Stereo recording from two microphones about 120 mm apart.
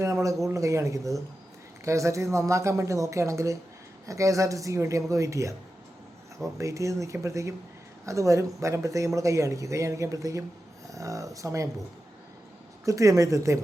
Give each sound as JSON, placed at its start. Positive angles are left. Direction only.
{"t": 0.0, "sound": "speech", "side_deg": -25}
{"t": 6.6, "sound": "speech", "side_deg": -25}
{"t": 12.8, "sound": "speech", "side_deg": -25}